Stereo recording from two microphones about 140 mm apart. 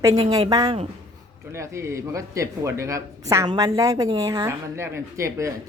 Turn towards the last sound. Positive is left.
turn(degrees=-20)  # may be behind; listen again after turning